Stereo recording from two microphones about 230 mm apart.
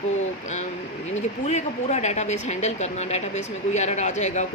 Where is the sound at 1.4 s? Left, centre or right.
Left.